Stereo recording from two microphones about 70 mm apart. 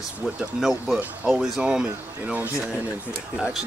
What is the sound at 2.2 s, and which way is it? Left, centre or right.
Speech, right.